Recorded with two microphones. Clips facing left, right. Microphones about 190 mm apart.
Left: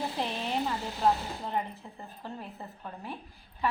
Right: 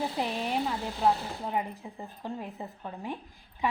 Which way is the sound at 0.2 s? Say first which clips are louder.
Even; 10° right (ahead or behind).